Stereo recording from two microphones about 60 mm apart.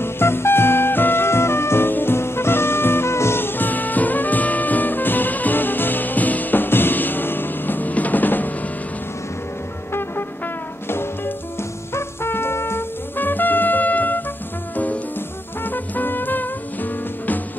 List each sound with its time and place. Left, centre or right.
0.0 s music: left
10.9 s music: left
11.9 s brass instrument: left
15.6 s music: left